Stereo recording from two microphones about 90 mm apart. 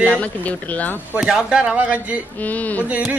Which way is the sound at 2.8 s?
15° right (ahead or behind).